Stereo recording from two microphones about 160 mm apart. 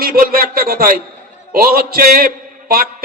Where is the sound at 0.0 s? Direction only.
65° right (ahead or behind).